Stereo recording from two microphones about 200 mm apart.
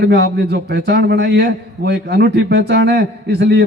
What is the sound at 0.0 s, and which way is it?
A man's voice, 60° right (ahead or behind).